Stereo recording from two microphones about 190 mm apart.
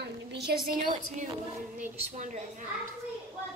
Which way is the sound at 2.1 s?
40° right (ahead or behind).